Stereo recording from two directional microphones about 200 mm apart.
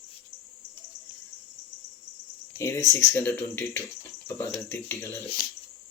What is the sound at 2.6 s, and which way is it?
Speech, 10° left (ahead or behind).